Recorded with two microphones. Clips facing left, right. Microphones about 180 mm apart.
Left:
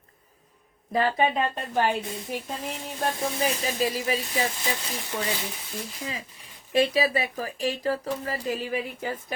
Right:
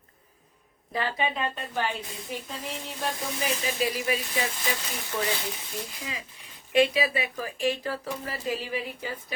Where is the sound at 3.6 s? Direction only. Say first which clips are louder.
Left 1 dB; 40° left (ahead or behind).